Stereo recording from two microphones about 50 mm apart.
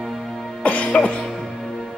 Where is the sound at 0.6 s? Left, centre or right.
Left.